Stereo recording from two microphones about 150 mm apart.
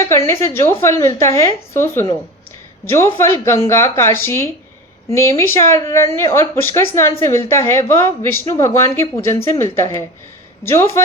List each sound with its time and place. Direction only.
0.0 s a woman's voice: 20° left (ahead or behind)